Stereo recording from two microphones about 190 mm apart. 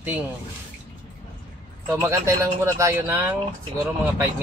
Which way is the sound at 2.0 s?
15° right (ahead or behind).